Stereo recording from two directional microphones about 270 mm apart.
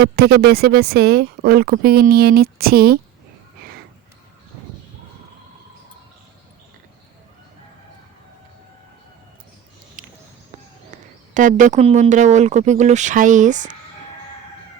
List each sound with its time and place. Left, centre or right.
0.0 s speech: right
10.9 s speech: right